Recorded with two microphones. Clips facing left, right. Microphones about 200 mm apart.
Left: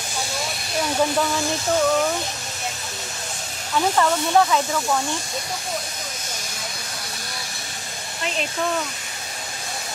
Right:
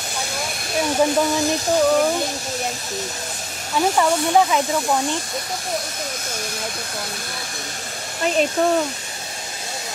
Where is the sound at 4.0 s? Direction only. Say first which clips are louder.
Right 1 dB; 15° right (ahead or behind).